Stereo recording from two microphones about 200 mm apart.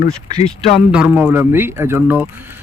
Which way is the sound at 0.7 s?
5° right (ahead or behind).